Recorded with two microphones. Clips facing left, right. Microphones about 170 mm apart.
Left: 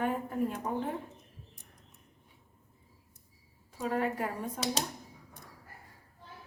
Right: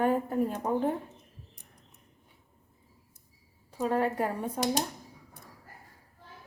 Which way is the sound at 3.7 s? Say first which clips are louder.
Right 4 dB; 35° right (ahead or behind).